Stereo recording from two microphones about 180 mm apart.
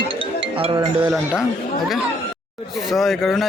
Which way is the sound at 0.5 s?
30° right (ahead or behind).